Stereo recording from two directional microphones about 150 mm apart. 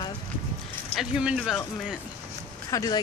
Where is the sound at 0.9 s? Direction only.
5° right (ahead or behind).